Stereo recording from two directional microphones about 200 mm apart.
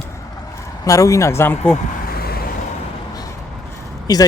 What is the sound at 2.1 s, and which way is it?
Vehicle, 50° left (ahead or behind).